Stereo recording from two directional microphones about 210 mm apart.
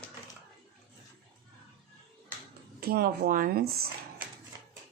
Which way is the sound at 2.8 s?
50° right (ahead or behind).